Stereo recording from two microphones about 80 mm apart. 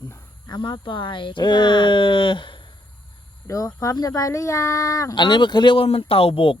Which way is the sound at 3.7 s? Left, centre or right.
Left.